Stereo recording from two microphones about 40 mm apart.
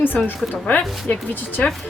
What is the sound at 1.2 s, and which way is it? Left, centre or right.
Speech, left.